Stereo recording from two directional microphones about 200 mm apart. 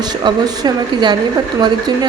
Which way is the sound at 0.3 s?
20° right (ahead or behind).